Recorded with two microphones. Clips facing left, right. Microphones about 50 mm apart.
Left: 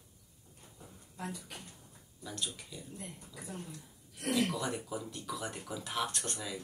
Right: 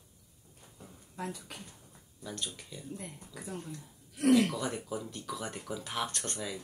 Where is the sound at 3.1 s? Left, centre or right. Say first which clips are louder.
Right 3 dB; right.